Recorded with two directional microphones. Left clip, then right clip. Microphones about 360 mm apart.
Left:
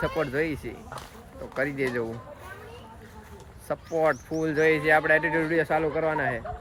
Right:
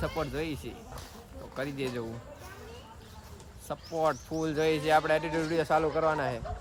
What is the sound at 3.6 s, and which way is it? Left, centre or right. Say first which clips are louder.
Speech: left 5 dB; centre.